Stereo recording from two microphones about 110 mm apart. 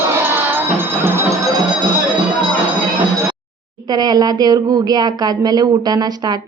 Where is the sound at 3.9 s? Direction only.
40° right (ahead or behind).